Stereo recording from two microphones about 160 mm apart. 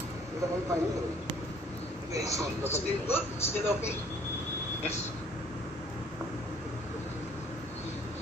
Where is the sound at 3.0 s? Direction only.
15° left (ahead or behind).